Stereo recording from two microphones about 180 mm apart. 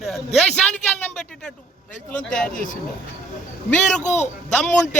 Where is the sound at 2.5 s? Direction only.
45° left (ahead or behind).